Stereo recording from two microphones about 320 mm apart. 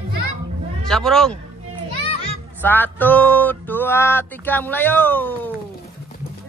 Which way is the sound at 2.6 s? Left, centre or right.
Centre.